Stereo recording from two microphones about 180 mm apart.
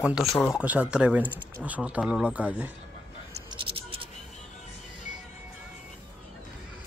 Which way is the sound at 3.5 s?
30° right (ahead or behind).